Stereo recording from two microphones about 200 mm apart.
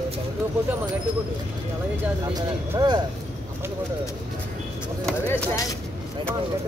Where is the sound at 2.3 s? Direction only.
20° right (ahead or behind).